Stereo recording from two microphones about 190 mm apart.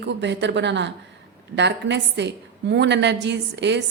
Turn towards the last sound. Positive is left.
turn(degrees=-65)  # may be behind; listen again after turning